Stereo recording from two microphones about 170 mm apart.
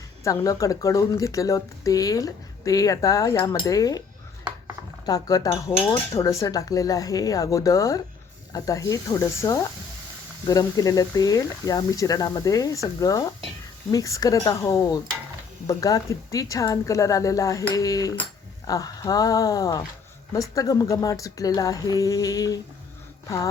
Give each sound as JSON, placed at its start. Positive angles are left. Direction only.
{"t": 0.3, "sound": "speech", "side_deg": 20}
{"t": 5.0, "sound": "speech", "side_deg": 20}